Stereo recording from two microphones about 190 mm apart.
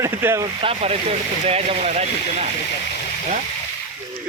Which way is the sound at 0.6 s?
30° right (ahead or behind).